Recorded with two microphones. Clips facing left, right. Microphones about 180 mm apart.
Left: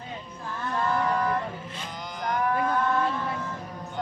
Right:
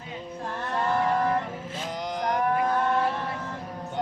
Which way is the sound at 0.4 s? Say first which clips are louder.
Even; 35° right (ahead or behind).